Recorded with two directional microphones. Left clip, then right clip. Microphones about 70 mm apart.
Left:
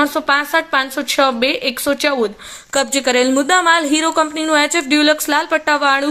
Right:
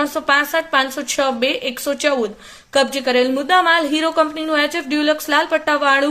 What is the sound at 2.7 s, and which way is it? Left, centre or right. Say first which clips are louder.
A woman's voice: left 1 dB; left.